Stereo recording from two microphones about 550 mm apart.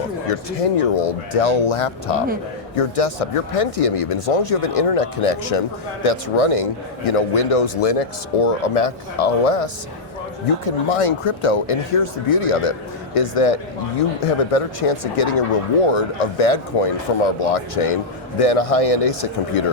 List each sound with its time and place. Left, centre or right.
0.3 s speech: left
2.7 s speech: left
10.7 s speech: left
13.1 s speech: left